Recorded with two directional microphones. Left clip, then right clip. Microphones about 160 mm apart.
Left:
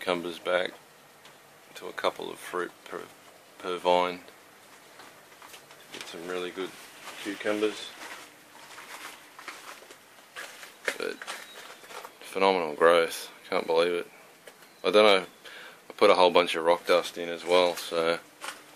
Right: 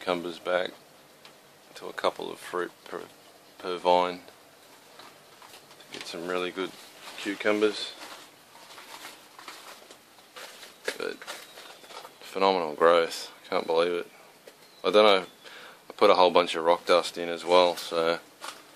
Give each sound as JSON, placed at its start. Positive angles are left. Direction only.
{"t": 0.0, "sound": "speech", "side_deg": 0}
{"t": 5.9, "sound": "speech", "side_deg": -30}
{"t": 12.2, "sound": "speech", "side_deg": 0}